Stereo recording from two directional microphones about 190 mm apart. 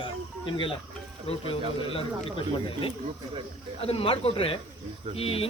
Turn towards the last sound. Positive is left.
turn(degrees=30)  # may be behind; listen again after turning